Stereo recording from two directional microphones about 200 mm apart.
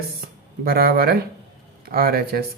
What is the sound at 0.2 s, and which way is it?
Speech, 50° right (ahead or behind).